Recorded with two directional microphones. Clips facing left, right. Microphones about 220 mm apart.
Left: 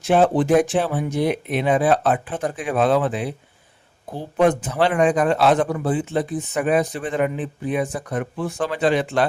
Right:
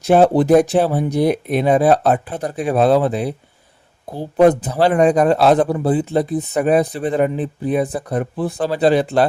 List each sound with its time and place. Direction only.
0.0 s a man's voice: 40° right (ahead or behind)